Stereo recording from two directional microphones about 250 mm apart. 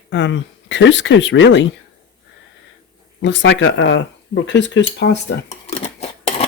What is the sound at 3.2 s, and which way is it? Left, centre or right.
Speech, left.